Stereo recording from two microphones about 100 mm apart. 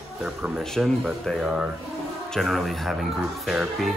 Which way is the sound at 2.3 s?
Centre (ahead or behind).